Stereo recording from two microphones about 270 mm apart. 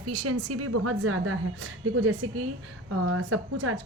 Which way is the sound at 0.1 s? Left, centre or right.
Right.